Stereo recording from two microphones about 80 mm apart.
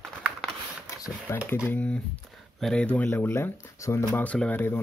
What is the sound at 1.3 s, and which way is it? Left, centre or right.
Speech, left.